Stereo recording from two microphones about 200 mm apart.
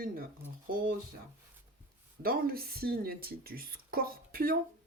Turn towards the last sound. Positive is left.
turn(degrees=-50)  # may be behind; listen again after turning